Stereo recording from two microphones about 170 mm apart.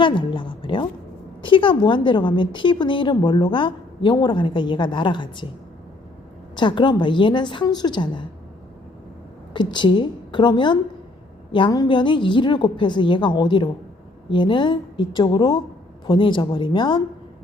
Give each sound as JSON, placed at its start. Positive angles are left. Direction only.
{"t": 0.0, "sound": "a woman's voice", "side_deg": 30}
{"t": 6.6, "sound": "a woman's voice", "side_deg": 25}
{"t": 9.5, "sound": "a woman's voice", "side_deg": 25}